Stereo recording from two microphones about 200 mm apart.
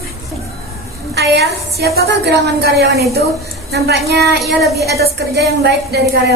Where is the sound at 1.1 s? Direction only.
55° right (ahead or behind).